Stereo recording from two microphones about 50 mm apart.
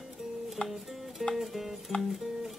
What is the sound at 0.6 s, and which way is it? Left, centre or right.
Music, centre.